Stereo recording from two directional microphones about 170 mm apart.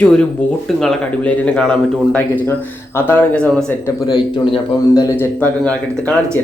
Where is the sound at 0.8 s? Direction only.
5° left (ahead or behind).